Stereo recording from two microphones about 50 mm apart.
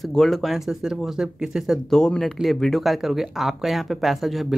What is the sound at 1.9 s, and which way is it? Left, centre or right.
Speech, centre.